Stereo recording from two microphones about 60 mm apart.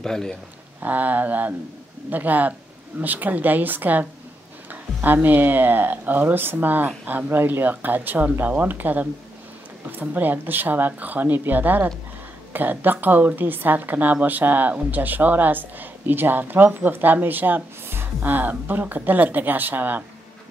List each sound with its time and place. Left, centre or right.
0.0 s speech: centre
0.8 s speech: right